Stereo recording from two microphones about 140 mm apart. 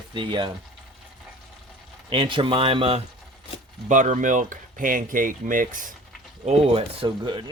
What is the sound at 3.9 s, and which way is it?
Speech, 65° right (ahead or behind).